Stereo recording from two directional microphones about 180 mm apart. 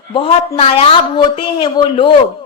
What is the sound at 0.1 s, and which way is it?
A woman's voice, 30° left (ahead or behind).